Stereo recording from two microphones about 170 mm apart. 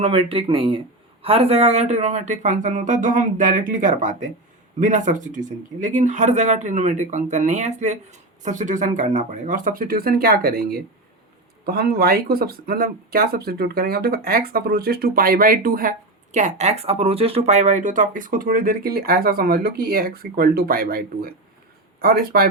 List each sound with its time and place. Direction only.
0.0 s speech: 35° right (ahead or behind); by 22.4 s 65° right (ahead or behind)